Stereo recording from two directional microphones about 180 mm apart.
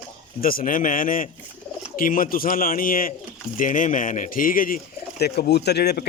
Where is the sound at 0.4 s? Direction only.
50° left (ahead or behind).